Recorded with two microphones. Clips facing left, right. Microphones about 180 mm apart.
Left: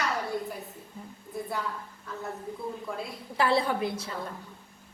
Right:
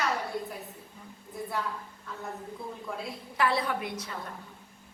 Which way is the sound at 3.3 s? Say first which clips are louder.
Left 3 dB; 30° left (ahead or behind).